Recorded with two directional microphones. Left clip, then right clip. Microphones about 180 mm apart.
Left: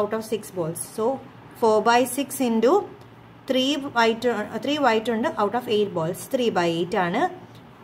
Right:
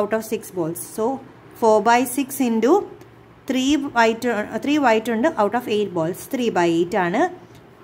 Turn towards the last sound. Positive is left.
turn(degrees=-20)  # may be behind; listen again after turning